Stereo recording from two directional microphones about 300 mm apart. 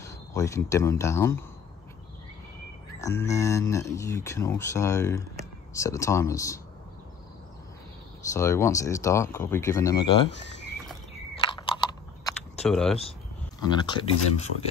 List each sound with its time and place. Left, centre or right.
0.0 s speech: centre
3.0 s speech: centre
8.3 s speech: centre
11.3 s computer keyboard: centre
12.6 s speech: centre
13.6 s speech: centre